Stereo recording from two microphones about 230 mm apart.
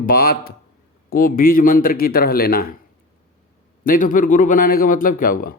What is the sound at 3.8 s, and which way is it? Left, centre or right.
A man's voice, left.